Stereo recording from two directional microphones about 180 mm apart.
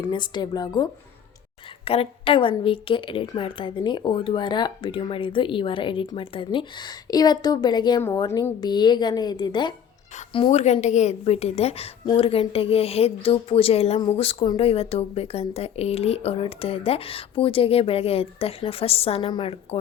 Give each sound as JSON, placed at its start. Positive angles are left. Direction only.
{"t": 0.0, "sound": "a woman's voice", "side_deg": 25}